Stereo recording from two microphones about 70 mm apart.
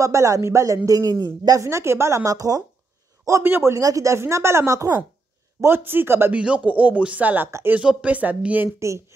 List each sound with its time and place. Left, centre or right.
0.0 s speech: right
1.2 s a woman's voice: right
1.6 s speech: right
3.4 s speech: right
3.7 s speech: right
5.6 s speech: right
6.3 s speech: centre
8.7 s speech: right